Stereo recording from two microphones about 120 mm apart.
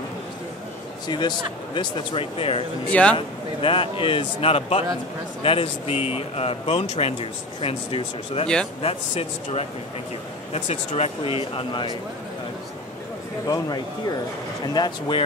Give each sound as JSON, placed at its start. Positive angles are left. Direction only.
{"t": 1.0, "sound": "speech", "side_deg": 40}
{"t": 1.8, "sound": "speech", "side_deg": 50}
{"t": 2.9, "sound": "a man's voice", "side_deg": 10}
{"t": 3.2, "sound": "speech", "side_deg": 50}
{"t": 9.1, "sound": "speech", "side_deg": 60}
{"t": 13.5, "sound": "speech", "side_deg": 35}